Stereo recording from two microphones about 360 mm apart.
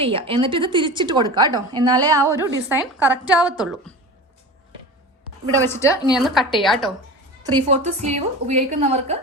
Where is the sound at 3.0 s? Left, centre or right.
Centre.